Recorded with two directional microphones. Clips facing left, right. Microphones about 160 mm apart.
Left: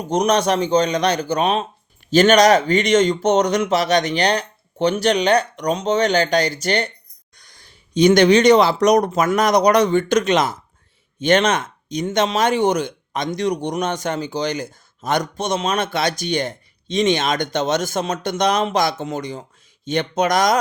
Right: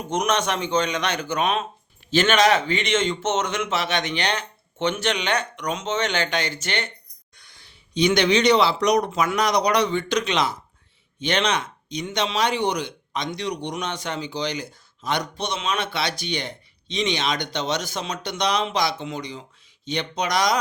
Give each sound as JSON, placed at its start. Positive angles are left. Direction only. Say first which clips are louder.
{"t": 0.1, "sound": "speech", "louder": "left 6 dB", "side_deg": 35}